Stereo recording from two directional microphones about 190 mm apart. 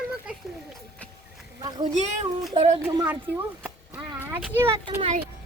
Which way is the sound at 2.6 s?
30° right (ahead or behind).